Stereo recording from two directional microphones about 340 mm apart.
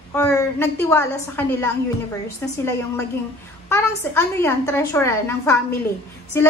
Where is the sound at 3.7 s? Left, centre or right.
Centre.